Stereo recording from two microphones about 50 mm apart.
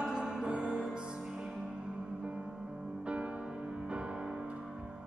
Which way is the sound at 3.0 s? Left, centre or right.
Right.